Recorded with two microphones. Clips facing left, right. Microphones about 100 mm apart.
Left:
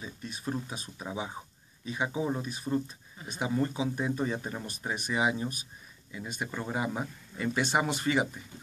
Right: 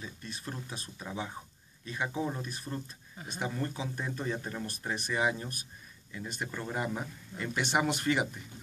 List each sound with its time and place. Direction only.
0.0 s speech: 15° left (ahead or behind)
2.4 s speech: 5° left (ahead or behind)